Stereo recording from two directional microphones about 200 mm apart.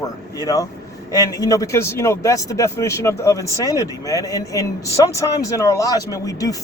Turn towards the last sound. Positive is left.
turn(degrees=15)  # may be behind; listen again after turning